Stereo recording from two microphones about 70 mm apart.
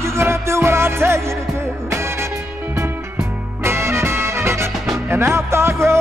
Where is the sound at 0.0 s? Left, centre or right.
Right.